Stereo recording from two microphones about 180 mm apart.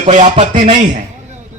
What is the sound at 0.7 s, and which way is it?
Speech, 25° right (ahead or behind).